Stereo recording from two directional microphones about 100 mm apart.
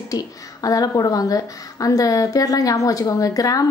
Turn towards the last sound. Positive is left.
turn(degrees=35)  # may be behind; listen again after turning